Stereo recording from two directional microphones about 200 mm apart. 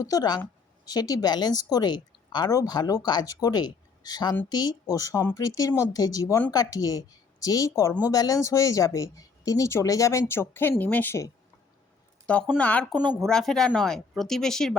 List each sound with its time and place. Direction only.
0.0 s a woman's voice: 20° left (ahead or behind)
12.3 s speech: 5° left (ahead or behind)